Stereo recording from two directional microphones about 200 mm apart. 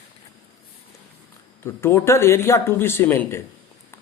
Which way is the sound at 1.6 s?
15° left (ahead or behind).